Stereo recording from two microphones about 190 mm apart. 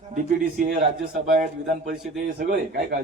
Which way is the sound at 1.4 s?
40° right (ahead or behind).